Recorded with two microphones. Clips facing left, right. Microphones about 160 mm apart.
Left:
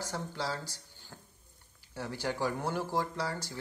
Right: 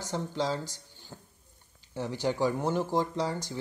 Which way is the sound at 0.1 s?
15° right (ahead or behind).